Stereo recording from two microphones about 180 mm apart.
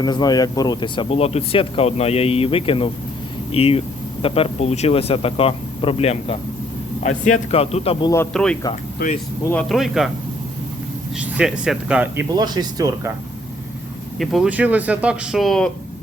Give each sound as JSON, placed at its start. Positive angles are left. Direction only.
{"t": 0.0, "sound": "speech", "side_deg": 20}
{"t": 8.3, "sound": "speech", "side_deg": 5}
{"t": 9.0, "sound": "speech", "side_deg": 55}
{"t": 9.5, "sound": "speech", "side_deg": 5}
{"t": 11.2, "sound": "speech", "side_deg": -5}
{"t": 12.3, "sound": "speech", "side_deg": -20}
{"t": 14.2, "sound": "speech", "side_deg": -5}